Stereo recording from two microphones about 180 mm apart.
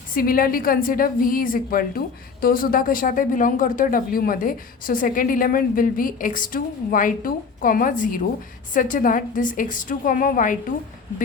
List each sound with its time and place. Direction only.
0.1 s a woman's voice: 55° left (ahead or behind)